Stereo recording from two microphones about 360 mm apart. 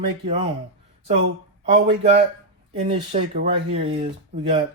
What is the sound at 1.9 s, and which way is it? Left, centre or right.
Speech, centre.